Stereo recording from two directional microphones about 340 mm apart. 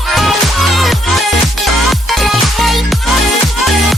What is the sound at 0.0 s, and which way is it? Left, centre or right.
Music, centre.